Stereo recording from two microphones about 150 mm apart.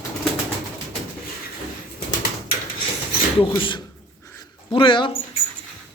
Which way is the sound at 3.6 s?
35° left (ahead or behind).